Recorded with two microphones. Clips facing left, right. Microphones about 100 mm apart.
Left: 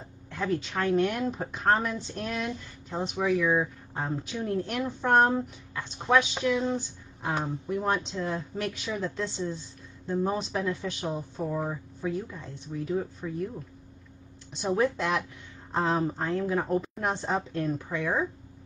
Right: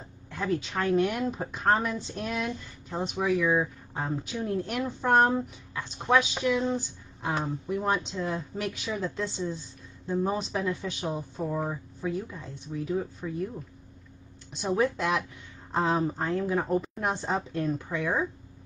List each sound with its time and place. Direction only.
0.3 s a woman's voice: centre (ahead or behind)
14.7 s a woman's voice: centre (ahead or behind)